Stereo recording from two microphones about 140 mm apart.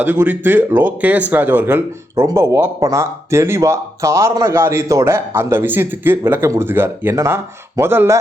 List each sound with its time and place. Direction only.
0.0 s speech: 15° right (ahead or behind)